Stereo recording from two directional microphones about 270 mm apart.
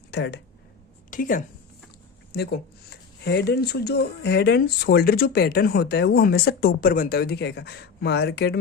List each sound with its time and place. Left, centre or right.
0.1 s speech: left